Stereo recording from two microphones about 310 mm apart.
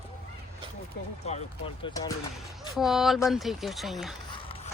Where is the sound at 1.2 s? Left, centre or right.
Left.